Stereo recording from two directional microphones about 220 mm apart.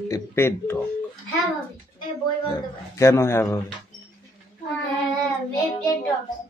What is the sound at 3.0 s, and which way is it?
Speech, 10° left (ahead or behind).